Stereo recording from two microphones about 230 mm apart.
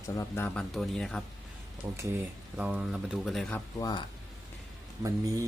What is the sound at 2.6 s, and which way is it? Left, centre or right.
Speech, centre.